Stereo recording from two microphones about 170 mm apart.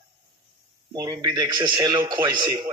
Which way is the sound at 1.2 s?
20° right (ahead or behind).